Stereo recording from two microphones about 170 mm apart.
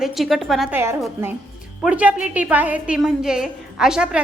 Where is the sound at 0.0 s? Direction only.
Centre (ahead or behind).